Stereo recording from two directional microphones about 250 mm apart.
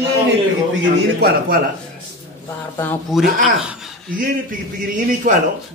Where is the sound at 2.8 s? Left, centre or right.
Centre.